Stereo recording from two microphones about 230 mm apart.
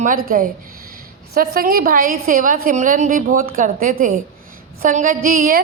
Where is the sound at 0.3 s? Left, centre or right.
Right.